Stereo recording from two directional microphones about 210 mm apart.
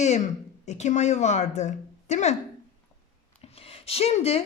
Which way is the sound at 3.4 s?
30° left (ahead or behind).